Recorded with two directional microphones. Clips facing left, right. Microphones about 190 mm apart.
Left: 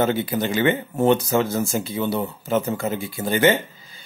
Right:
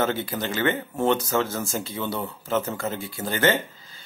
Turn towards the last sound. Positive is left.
turn(degrees=15)  # may be behind; listen again after turning